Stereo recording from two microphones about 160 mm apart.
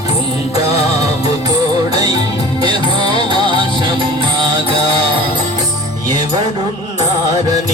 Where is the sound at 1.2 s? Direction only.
25° right (ahead or behind).